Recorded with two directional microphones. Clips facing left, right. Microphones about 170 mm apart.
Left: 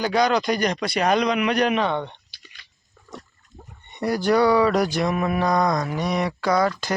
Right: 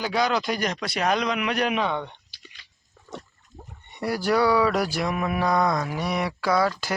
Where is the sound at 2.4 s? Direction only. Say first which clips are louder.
Right 1 dB; 25° right (ahead or behind).